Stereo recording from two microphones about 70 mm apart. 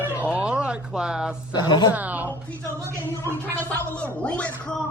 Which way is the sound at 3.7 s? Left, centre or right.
Centre.